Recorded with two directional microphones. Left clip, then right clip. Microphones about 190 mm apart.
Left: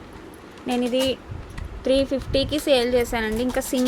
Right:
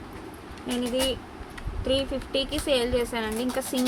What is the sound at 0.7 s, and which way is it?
Speech, 30° left (ahead or behind).